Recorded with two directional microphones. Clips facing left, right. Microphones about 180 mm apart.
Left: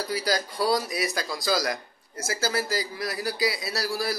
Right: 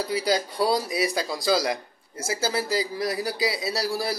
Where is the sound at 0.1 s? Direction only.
25° right (ahead or behind).